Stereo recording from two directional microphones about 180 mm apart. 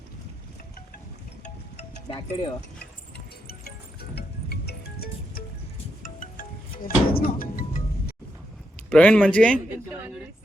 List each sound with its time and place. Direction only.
1.7 s wind chime: 30° left (ahead or behind)
4.1 s music: 60° left (ahead or behind)
6.0 s wind chime: 50° left (ahead or behind)
6.8 s speech: 55° left (ahead or behind)
8.9 s speech: 5° left (ahead or behind)